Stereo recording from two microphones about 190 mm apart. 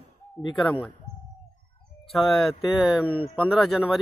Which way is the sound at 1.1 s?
5° left (ahead or behind).